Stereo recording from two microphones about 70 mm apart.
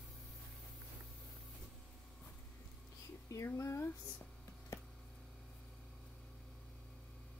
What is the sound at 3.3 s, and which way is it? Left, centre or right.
Speech, left.